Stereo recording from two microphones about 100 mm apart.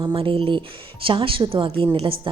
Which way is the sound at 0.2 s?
60° right (ahead or behind).